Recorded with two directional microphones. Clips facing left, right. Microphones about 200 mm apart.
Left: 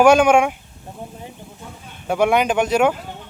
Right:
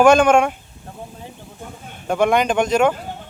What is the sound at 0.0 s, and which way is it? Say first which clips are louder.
Speech: even; 10° left (ahead or behind).